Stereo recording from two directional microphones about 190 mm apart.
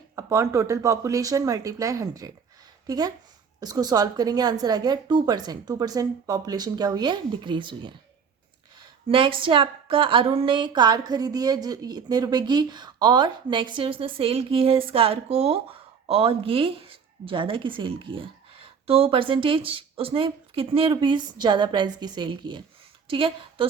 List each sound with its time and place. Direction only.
0.2 s a woman's voice: 15° right (ahead or behind)
9.0 s a woman's voice: 25° right (ahead or behind)